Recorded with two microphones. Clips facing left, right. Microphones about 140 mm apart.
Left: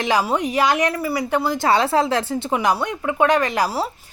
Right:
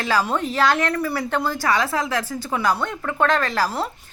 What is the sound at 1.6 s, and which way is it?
Speech, 30° left (ahead or behind).